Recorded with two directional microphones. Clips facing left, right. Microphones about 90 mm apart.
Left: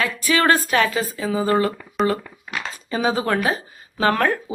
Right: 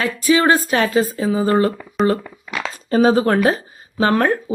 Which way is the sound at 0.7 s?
30° right (ahead or behind).